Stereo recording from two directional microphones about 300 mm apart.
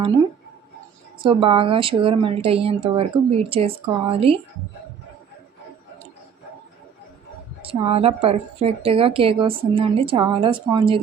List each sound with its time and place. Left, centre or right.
1.2 s a woman's voice: centre
7.6 s a woman's voice: centre